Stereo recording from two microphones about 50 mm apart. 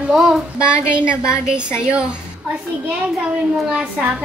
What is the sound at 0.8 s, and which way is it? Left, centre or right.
Child singing, right.